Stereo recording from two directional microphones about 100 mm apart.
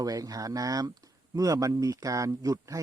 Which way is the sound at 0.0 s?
40° right (ahead or behind).